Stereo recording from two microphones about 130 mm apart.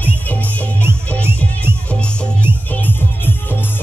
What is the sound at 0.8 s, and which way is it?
Music, 15° right (ahead or behind).